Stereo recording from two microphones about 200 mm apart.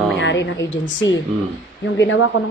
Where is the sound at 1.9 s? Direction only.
75° left (ahead or behind).